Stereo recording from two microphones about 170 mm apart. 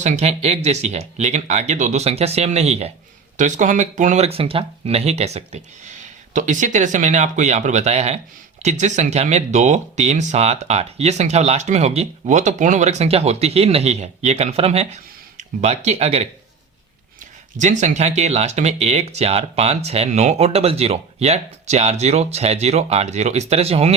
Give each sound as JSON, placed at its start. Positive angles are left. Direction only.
{"t": 0.0, "sound": "speech", "side_deg": -40}
{"t": 17.6, "sound": "speech", "side_deg": -45}